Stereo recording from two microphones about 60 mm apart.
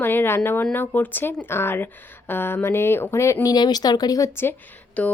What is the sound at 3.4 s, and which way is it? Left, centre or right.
Speech, left.